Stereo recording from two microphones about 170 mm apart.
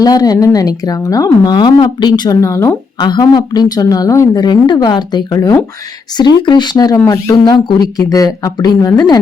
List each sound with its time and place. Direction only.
0.0 s a woman's voice: 20° left (ahead or behind)